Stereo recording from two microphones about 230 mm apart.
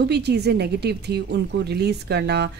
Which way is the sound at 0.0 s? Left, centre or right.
Right.